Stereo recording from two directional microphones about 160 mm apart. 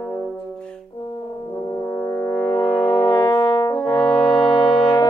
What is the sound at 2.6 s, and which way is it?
French horn, 30° left (ahead or behind).